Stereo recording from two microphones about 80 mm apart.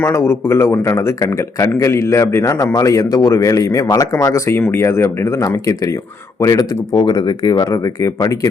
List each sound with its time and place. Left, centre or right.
0.0 s speech: left
4.4 s speech: left
6.9 s speech: left